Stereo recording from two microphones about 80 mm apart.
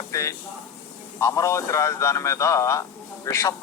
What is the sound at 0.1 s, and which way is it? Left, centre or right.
A man's voice, left.